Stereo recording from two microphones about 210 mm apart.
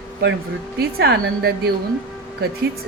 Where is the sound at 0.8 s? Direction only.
50° right (ahead or behind).